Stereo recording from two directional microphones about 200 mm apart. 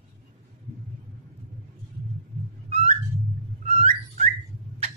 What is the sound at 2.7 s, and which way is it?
Music, 30° right (ahead or behind).